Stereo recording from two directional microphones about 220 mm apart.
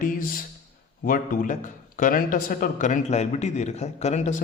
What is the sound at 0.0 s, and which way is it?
A man's voice, 40° left (ahead or behind).